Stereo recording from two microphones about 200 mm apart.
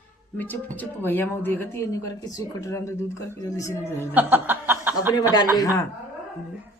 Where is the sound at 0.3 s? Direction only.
10° left (ahead or behind).